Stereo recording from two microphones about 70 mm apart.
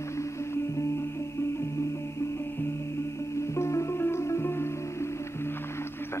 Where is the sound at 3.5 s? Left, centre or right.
Left.